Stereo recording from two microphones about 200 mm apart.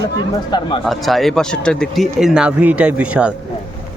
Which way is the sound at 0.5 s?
20° left (ahead or behind).